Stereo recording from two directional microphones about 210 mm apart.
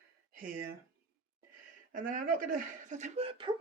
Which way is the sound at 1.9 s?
40° right (ahead or behind).